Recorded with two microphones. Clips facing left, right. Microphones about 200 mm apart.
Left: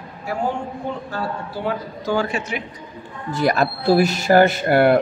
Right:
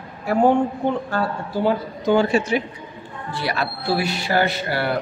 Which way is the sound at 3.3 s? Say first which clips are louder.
Left 6 dB; 45° left (ahead or behind).